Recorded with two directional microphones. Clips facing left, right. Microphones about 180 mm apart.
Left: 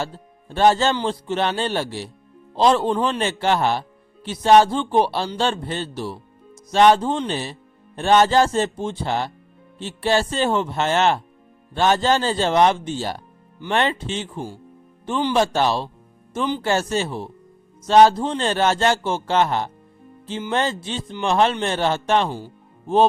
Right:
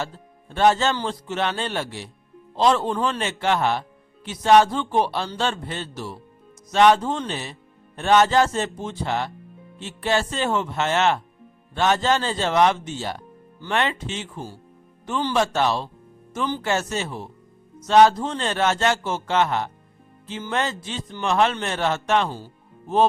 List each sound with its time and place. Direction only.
0.0 s a man's voice: 35° left (ahead or behind)
22.3 s speech: 15° left (ahead or behind)